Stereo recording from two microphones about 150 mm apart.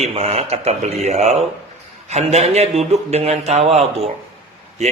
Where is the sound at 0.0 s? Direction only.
45° right (ahead or behind).